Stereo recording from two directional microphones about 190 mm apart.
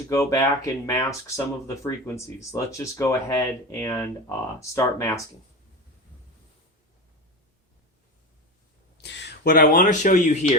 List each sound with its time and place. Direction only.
0.1 s speech: 15° left (ahead or behind)
9.0 s speech: 65° left (ahead or behind); by 10.6 s 40° left (ahead or behind)